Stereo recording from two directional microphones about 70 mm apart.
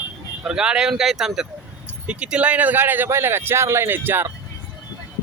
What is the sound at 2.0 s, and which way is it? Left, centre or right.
Speech, centre.